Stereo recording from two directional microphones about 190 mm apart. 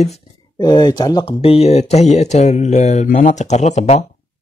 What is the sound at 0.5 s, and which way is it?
A man's voice, 20° left (ahead or behind).